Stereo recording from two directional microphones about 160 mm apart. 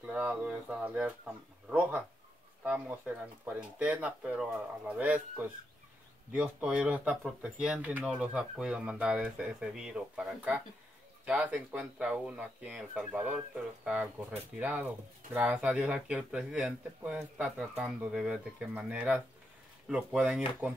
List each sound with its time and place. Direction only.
0.0 s speech: 5° right (ahead or behind)